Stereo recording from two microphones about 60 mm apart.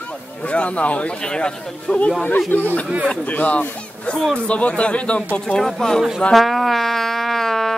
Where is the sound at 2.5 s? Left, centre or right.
Left; by 6.0 s centre.